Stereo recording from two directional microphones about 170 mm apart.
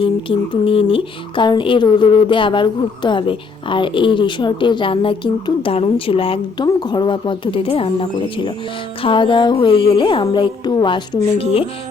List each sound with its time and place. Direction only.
0.0 s speech: 30° left (ahead or behind)
9.0 s speech: 30° left (ahead or behind)